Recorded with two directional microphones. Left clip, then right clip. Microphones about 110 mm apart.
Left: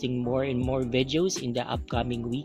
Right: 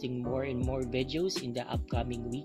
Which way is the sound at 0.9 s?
45° left (ahead or behind).